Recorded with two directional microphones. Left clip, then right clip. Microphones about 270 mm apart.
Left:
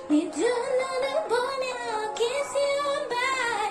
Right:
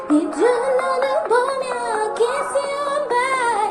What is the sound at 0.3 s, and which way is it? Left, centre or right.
Music, right.